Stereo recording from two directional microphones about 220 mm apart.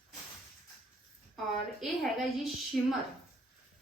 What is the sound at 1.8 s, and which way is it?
A woman's voice, centre (ahead or behind).